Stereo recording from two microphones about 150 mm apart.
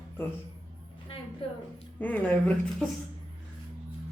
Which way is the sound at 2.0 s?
10° left (ahead or behind).